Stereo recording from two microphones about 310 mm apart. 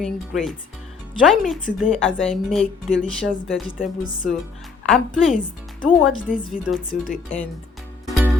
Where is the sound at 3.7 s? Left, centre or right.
Left.